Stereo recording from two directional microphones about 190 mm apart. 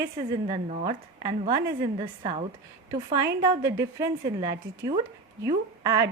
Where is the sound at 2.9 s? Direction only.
15° right (ahead or behind).